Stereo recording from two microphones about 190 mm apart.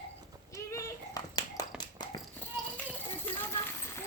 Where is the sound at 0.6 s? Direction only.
15° left (ahead or behind).